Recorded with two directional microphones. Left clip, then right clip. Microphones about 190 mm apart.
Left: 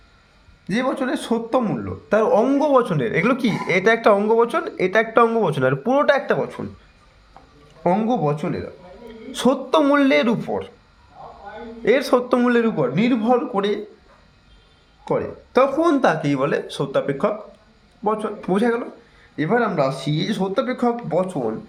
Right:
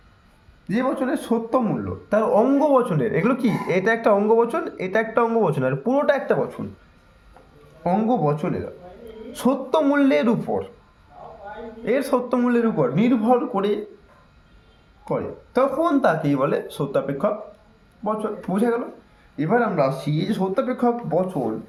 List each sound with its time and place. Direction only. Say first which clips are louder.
0.7 s a man's voice: left 1 dB; 55° left (ahead or behind)
7.9 s a man's voice: left 1 dB; 45° left (ahead or behind)
11.9 s speech: left 4 dB; 40° left (ahead or behind)
15.0 s speech: left 3 dB; 50° left (ahead or behind)